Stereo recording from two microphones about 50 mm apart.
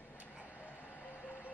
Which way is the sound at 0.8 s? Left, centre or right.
Left.